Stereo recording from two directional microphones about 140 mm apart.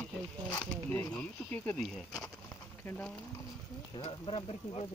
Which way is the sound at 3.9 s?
40° left (ahead or behind).